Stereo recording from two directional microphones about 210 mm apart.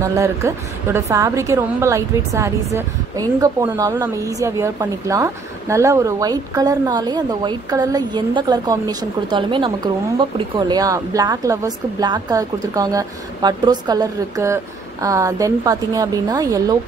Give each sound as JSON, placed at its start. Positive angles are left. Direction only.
{"t": 0.0, "sound": "a woman's voice", "side_deg": -15}